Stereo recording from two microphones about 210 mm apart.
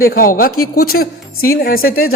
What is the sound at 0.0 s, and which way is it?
A man's voice, 45° left (ahead or behind).